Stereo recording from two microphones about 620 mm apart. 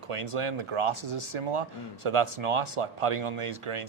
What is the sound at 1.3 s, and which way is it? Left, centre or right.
Speech, right.